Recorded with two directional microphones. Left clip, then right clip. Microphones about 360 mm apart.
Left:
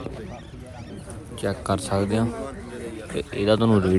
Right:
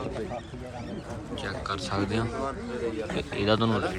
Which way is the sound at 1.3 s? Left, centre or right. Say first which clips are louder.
Left 7 dB; centre.